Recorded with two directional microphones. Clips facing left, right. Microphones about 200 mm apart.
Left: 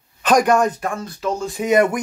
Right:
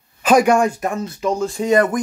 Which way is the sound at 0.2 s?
10° right (ahead or behind).